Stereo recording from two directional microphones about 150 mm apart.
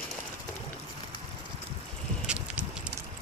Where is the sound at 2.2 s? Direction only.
5° right (ahead or behind).